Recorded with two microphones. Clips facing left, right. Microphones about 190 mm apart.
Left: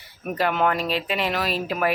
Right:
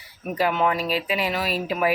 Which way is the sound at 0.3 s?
5° right (ahead or behind).